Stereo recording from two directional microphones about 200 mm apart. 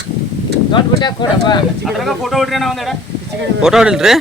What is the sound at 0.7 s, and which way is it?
Speech, 20° left (ahead or behind).